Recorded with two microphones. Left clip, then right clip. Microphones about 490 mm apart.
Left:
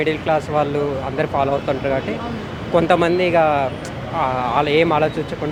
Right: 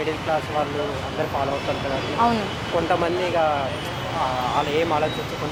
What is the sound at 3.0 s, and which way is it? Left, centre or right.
Speech, left.